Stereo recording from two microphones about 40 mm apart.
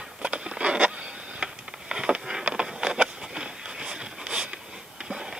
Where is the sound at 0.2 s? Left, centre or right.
Right.